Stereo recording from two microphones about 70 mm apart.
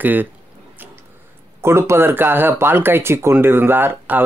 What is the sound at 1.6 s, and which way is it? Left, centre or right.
Speech, right.